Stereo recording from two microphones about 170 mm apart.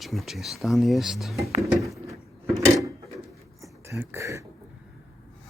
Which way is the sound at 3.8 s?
15° right (ahead or behind).